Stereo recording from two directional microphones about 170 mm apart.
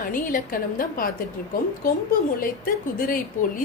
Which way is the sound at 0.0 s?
55° left (ahead or behind).